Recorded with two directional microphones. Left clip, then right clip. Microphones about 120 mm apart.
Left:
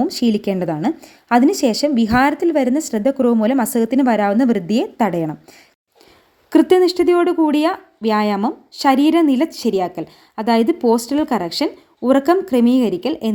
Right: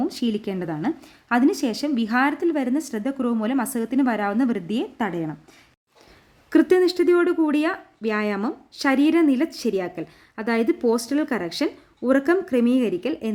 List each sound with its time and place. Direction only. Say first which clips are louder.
0.1 s a woman's voice: left 8 dB; 50° left (ahead or behind)
6.5 s a woman's voice: left 5 dB; 30° left (ahead or behind)